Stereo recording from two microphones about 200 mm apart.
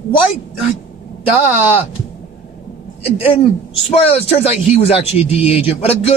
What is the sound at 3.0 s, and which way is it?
Speech, 30° left (ahead or behind).